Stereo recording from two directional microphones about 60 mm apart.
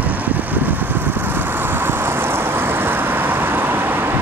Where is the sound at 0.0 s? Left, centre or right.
Right.